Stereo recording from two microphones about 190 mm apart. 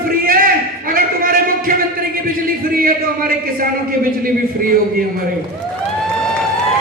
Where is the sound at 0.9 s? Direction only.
50° right (ahead or behind).